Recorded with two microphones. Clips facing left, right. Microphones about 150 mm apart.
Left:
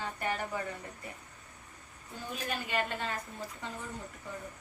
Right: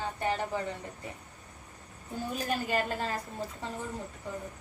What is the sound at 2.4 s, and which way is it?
Speech, 40° right (ahead or behind).